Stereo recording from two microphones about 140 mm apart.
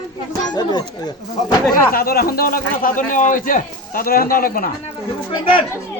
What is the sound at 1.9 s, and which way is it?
A man's voice, 90° left.